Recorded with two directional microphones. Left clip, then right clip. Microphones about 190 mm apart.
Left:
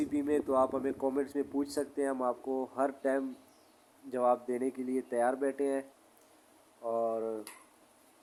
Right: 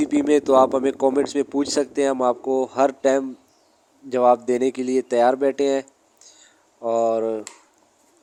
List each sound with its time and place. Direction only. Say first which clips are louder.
0.0 s speech: right 13 dB; 40° right (ahead or behind)
6.8 s speech: right 13 dB; 35° right (ahead or behind)